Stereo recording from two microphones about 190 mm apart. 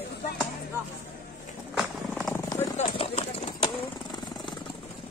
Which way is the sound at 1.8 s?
Centre (ahead or behind).